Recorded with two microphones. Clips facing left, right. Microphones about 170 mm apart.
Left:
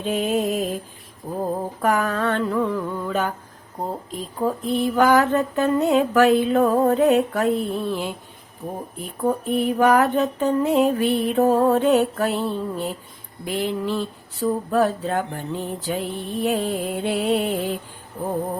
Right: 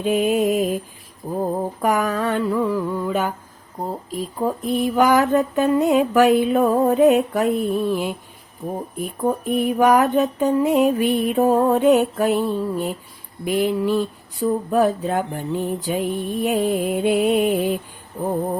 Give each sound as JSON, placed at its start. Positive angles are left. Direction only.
{"t": 0.0, "sound": "speech", "side_deg": -15}
{"t": 1.2, "sound": "mantra", "side_deg": 0}
{"t": 1.8, "sound": "speech", "side_deg": -15}
{"t": 4.4, "sound": "speech", "side_deg": -15}